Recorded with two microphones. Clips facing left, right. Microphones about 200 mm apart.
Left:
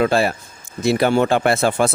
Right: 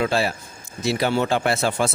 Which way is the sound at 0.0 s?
55° left (ahead or behind).